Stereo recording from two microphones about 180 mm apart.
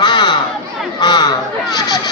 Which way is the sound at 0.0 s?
25° left (ahead or behind).